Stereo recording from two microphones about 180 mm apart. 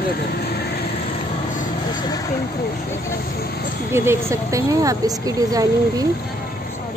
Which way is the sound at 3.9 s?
15° right (ahead or behind).